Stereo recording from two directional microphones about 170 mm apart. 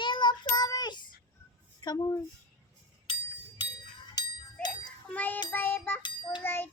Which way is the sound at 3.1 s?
30° left (ahead or behind).